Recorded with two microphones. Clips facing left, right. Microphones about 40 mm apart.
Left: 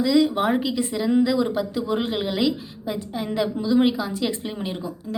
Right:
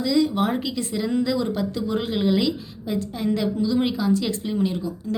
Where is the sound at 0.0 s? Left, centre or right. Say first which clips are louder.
Left 2 dB; centre.